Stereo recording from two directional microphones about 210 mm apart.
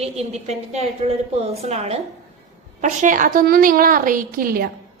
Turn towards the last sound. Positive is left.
turn(degrees=-45)  # may be behind; listen again after turning